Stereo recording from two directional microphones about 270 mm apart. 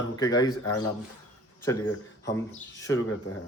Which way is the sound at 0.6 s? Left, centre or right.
Left.